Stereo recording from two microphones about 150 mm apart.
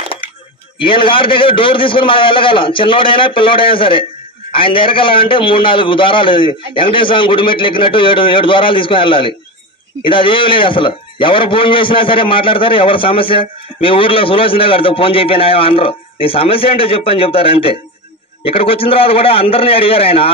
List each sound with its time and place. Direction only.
0.7 s a man's voice: 35° left (ahead or behind)